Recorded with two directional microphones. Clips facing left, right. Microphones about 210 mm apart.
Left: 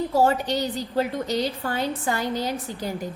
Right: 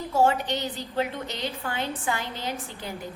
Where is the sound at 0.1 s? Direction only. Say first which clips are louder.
Right 1 dB; 35° left (ahead or behind).